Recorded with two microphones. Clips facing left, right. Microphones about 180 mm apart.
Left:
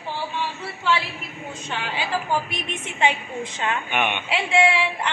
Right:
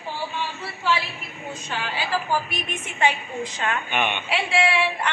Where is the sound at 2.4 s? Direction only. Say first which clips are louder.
Even; 25° left (ahead or behind).